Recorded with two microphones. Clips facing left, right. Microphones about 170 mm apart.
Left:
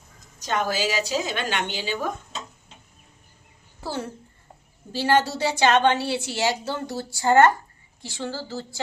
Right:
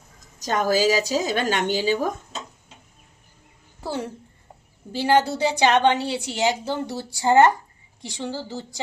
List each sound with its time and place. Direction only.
0.3 s a woman's voice: 40° right (ahead or behind)
3.8 s a woman's voice: 15° right (ahead or behind)